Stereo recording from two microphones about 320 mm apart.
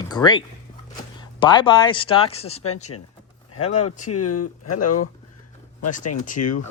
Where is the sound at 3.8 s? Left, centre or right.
Left.